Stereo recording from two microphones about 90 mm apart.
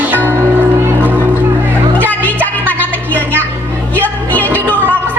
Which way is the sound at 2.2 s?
20° left (ahead or behind).